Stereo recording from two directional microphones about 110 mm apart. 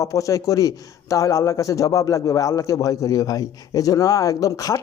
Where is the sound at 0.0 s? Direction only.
30° left (ahead or behind).